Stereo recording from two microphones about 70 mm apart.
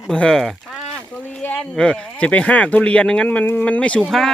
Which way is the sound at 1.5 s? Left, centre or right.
Centre.